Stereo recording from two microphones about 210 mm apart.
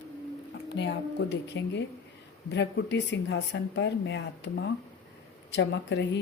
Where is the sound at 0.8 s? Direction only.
55° left (ahead or behind).